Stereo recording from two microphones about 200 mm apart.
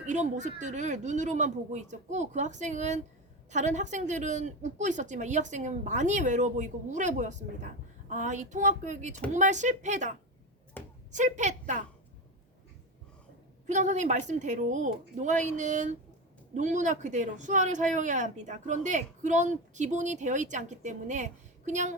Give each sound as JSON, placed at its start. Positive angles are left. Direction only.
{"t": 0.0, "sound": "a woman's voice", "side_deg": -35}
{"t": 10.8, "sound": "a sound", "side_deg": 10}
{"t": 11.1, "sound": "a woman's voice", "side_deg": -35}
{"t": 13.7, "sound": "a woman's voice", "side_deg": -40}